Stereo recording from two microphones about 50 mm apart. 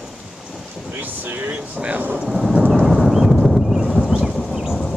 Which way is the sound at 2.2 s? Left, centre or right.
Centre.